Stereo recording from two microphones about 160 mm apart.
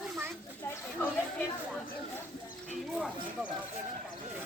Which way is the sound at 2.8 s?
5° right (ahead or behind).